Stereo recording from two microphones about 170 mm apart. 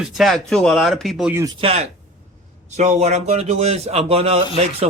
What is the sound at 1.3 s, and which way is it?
Speech, 20° right (ahead or behind).